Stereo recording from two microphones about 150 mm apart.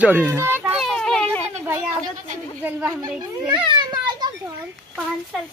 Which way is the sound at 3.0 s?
30° right (ahead or behind).